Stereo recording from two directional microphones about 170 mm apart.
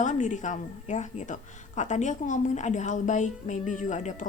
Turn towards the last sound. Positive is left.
turn(degrees=45)  # may be behind; listen again after turning